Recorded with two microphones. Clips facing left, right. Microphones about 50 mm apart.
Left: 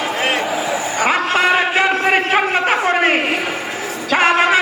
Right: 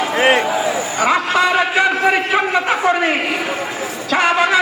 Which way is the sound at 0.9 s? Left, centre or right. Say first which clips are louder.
Right 1 dB; left.